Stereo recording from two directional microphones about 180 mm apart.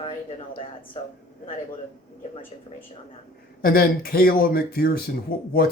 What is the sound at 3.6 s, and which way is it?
Speech, 55° left (ahead or behind).